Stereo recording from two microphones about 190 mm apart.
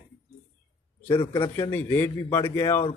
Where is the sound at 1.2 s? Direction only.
25° left (ahead or behind).